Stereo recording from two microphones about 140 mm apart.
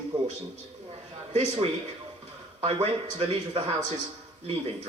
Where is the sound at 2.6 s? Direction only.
45° right (ahead or behind).